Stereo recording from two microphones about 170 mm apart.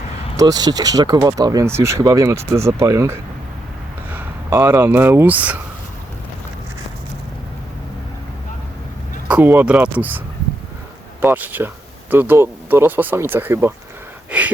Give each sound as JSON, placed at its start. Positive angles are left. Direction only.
{"t": 0.3, "sound": "speech", "side_deg": -25}
{"t": 9.3, "sound": "speech", "side_deg": -10}
{"t": 11.2, "sound": "speech", "side_deg": -10}
{"t": 14.3, "sound": "a sound", "side_deg": -10}